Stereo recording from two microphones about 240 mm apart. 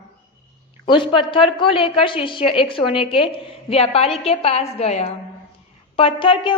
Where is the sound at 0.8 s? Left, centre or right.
Centre.